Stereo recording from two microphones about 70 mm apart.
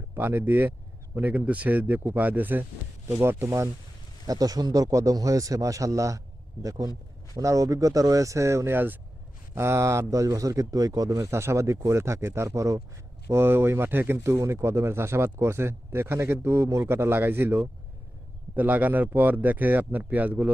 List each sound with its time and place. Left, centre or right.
0.1 s speech: right
4.3 s speech: right
8.7 s speech: right
9.6 s speech: right
11.2 s speech: right
13.3 s speech: right